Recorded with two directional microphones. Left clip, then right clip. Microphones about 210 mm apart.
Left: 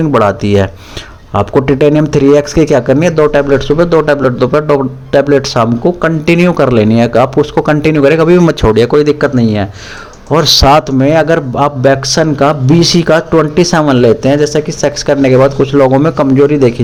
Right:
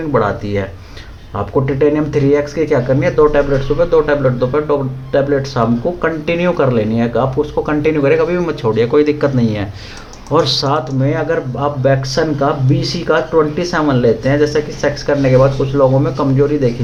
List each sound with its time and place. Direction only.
0.1 s a man's voice: 50° left (ahead or behind)